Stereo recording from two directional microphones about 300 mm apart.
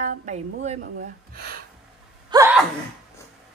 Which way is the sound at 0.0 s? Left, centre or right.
Right.